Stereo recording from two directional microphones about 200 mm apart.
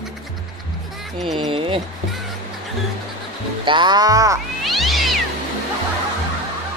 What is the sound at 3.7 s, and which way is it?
Speech, 20° right (ahead or behind).